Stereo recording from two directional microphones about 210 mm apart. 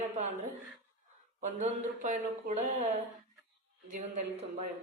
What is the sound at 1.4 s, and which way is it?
Speech, 35° right (ahead or behind).